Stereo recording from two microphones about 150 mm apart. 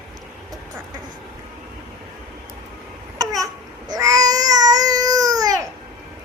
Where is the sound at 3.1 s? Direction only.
25° right (ahead or behind).